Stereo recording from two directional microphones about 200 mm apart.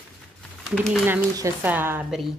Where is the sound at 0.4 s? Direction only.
Centre (ahead or behind).